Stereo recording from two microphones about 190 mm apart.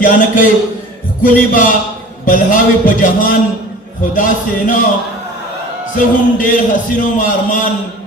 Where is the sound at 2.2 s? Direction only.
45° left (ahead or behind).